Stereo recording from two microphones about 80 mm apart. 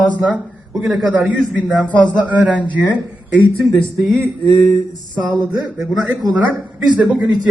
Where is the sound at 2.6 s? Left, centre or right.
Centre.